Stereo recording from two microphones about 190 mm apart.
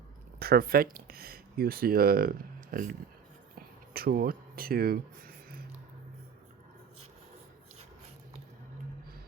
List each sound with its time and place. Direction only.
0.3 s speech: 50° right (ahead or behind)
3.9 s speech: 55° right (ahead or behind)